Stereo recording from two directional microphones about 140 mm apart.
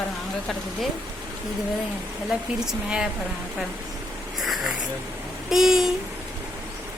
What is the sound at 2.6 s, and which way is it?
Speech, 5° right (ahead or behind).